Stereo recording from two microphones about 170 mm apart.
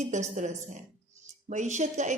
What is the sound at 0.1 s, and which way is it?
Speech, 45° right (ahead or behind).